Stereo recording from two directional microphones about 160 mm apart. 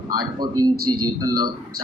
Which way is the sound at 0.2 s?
25° right (ahead or behind).